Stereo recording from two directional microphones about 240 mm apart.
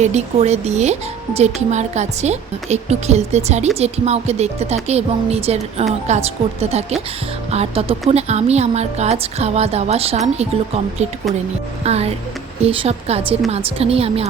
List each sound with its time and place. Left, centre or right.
0.0 s a woman's voice: right
11.8 s a woman's voice: right